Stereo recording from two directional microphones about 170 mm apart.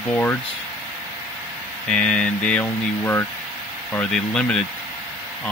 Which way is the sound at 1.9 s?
5° left (ahead or behind).